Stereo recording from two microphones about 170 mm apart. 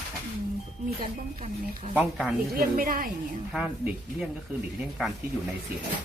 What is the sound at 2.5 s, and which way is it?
Speech, 60° right (ahead or behind).